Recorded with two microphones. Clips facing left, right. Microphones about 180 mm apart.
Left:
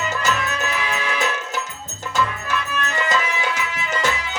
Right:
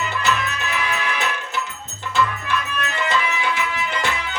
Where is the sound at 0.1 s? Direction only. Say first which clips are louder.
Even; 40° left (ahead or behind).